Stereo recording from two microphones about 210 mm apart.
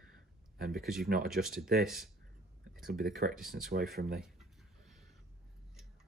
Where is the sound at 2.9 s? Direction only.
45° right (ahead or behind).